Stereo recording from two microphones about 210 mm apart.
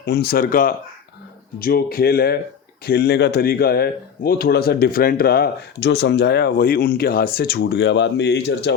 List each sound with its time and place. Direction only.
0.0 s speech: 50° left (ahead or behind)